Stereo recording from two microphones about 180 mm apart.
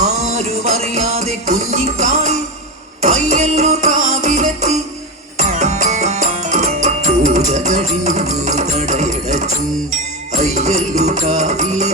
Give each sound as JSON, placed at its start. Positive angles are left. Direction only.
{"t": 0.0, "sound": "music", "side_deg": -40}